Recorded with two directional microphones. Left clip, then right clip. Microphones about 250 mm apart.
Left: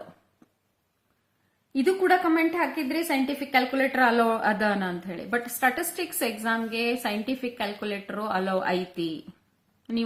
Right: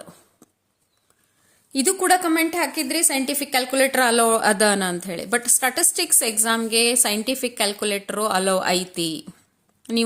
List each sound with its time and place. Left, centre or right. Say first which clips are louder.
1.7 s a woman's voice: right 3 dB; right